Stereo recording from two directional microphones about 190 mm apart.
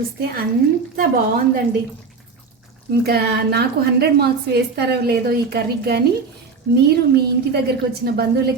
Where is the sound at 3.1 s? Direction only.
55° right (ahead or behind).